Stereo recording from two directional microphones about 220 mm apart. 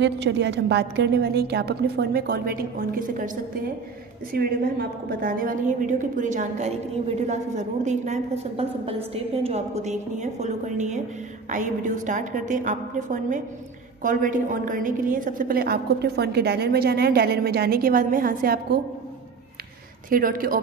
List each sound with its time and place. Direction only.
0.0 s a woman's voice: 55° right (ahead or behind)
20.1 s a woman's voice: 40° right (ahead or behind)